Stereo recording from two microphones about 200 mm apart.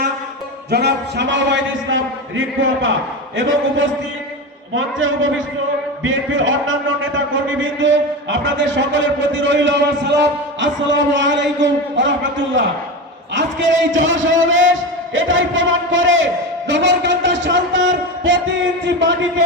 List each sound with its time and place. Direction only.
0.7 s a man's voice: 55° right (ahead or behind); by 2.9 s 75° right (ahead or behind)
4.7 s a man's voice: 75° right (ahead or behind)